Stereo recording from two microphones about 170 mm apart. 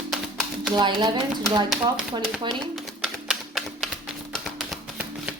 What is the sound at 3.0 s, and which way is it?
Typewriter, centre (ahead or behind).